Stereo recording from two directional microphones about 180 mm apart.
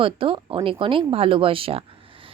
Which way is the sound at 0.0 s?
30° right (ahead or behind).